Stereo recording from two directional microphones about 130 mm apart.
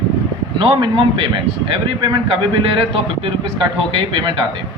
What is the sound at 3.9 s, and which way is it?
Speech, 35° right (ahead or behind).